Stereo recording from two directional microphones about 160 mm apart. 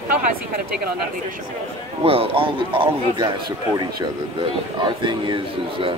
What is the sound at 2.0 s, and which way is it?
A man's voice, 35° right (ahead or behind).